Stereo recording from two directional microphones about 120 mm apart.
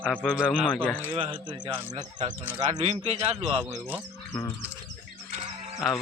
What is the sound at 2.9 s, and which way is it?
Speech, 60° right (ahead or behind).